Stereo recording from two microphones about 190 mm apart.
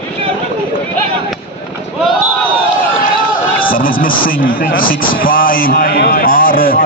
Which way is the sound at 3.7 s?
50° left (ahead or behind).